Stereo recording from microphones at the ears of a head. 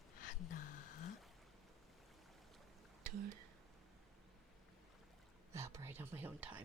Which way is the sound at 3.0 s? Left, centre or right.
Right.